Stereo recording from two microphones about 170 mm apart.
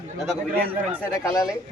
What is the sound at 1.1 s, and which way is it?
Speech, 20° left (ahead or behind).